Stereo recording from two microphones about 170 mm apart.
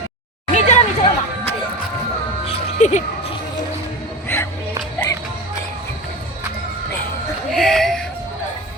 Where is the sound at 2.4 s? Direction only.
40° left (ahead or behind).